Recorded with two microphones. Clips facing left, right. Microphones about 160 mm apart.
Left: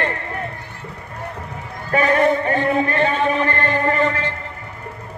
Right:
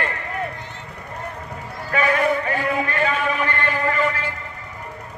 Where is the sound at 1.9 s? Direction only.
40° left (ahead or behind).